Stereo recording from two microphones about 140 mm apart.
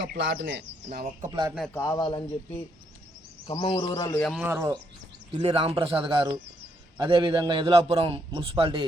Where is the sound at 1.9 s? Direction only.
35° left (ahead or behind).